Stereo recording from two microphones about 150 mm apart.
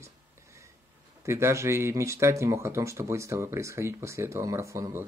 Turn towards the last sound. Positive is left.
turn(degrees=-20)  # may be behind; listen again after turning